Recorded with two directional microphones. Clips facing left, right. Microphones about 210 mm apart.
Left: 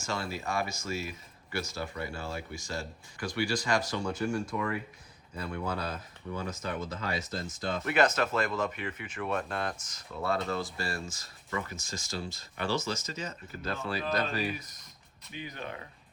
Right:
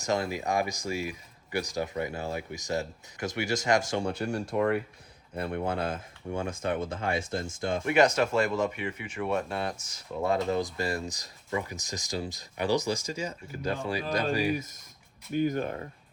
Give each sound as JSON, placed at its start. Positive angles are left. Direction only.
{"t": 0.0, "sound": "speech", "side_deg": -20}
{"t": 3.8, "sound": "speech", "side_deg": -60}
{"t": 7.9, "sound": "speech", "side_deg": -10}
{"t": 15.3, "sound": "speech", "side_deg": -45}